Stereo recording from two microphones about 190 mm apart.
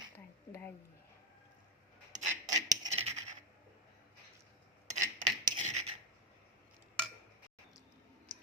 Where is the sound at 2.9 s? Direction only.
35° right (ahead or behind).